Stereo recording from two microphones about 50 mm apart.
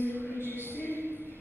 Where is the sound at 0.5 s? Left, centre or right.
Left.